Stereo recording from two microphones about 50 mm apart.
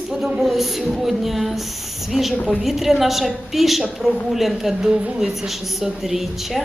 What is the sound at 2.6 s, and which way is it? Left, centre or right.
A woman's voice, centre.